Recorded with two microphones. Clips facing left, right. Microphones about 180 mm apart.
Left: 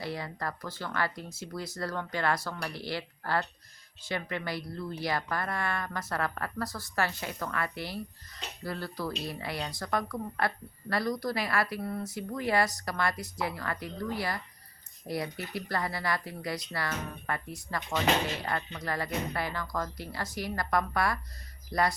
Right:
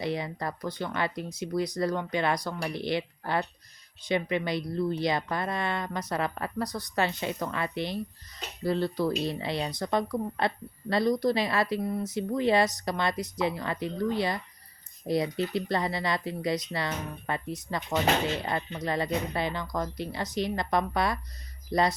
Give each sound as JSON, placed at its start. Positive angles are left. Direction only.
{"t": 0.0, "sound": "speech", "side_deg": -20}